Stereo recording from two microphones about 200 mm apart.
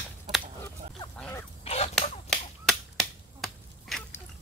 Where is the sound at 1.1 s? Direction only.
5° left (ahead or behind).